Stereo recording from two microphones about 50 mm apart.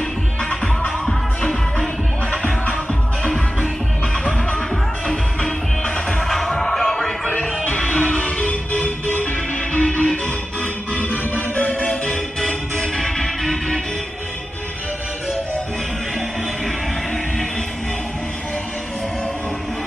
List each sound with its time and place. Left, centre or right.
1.0 s music: centre
2.4 s music: left
5.9 s music: centre
7.6 s music: left
11.9 s music: centre